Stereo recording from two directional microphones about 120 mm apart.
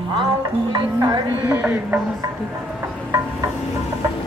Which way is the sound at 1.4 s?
15° right (ahead or behind).